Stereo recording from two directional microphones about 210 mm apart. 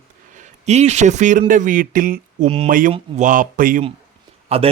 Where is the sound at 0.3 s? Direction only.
30° right (ahead or behind).